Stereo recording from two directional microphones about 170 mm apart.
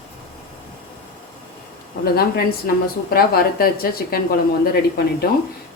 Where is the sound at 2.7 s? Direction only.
60° left (ahead or behind).